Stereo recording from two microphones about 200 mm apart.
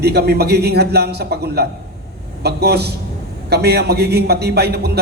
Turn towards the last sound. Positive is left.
turn(degrees=-55)  # may be behind; listen again after turning